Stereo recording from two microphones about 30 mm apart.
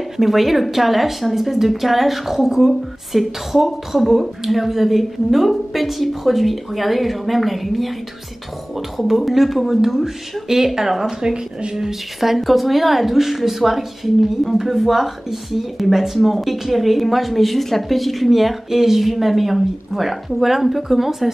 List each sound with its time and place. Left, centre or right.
0.2 s a woman's voice: centre